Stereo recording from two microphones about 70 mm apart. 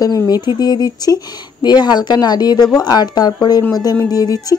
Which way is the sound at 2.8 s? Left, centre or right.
Left.